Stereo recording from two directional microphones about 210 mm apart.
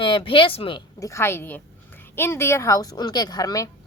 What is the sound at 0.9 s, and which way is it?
A woman's voice, 15° left (ahead or behind).